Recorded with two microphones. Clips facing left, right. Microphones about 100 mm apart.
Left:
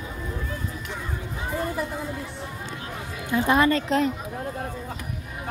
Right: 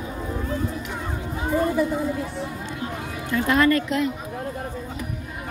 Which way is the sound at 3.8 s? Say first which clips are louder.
Left 1 dB; 35° left (ahead or behind).